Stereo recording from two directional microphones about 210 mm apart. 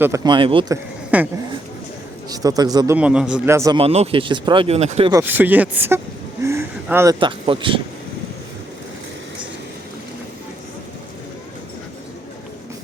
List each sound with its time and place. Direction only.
0.0 s speech: 20° right (ahead or behind)
1.1 s speech: 5° right (ahead or behind)
2.3 s a man's voice: 15° right (ahead or behind)
3.8 s speech: 30° right (ahead or behind)
5.1 s a man's voice: 10° right (ahead or behind); by 7.8 s 25° right (ahead or behind)